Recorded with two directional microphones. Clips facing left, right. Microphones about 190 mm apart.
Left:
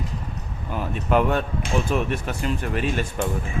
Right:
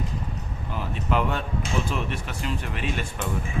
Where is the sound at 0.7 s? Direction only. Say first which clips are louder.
Left 5 dB; 50° left (ahead or behind).